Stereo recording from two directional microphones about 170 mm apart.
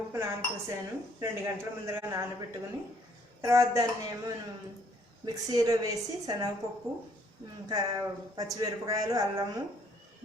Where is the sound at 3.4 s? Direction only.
20° right (ahead or behind).